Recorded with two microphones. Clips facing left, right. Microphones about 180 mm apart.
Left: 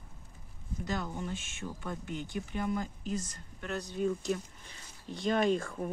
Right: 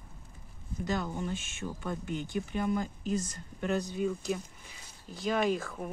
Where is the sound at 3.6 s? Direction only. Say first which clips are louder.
Right 3 dB; 5° right (ahead or behind).